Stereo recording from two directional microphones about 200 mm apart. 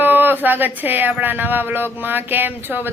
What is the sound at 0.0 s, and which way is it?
A woman's voice, 10° right (ahead or behind).